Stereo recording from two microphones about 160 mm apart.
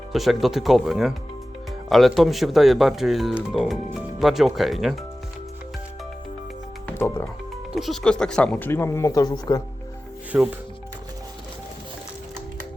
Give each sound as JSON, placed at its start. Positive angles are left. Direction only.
{"t": 0.1, "sound": "speech", "side_deg": 0}
{"t": 6.8, "sound": "music", "side_deg": 15}
{"t": 7.7, "sound": "speech", "side_deg": 0}
{"t": 10.3, "sound": "speech", "side_deg": -10}